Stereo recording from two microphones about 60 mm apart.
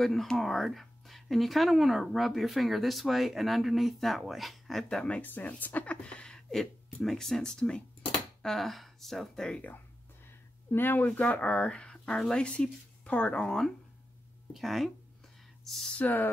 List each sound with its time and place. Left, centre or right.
0.0 s speech: centre
4.8 s speech: centre
5.2 s speech: left; by 9.6 s centre
10.7 s speech: left
11.1 s speech: left; by 15.9 s centre
15.9 s speech: left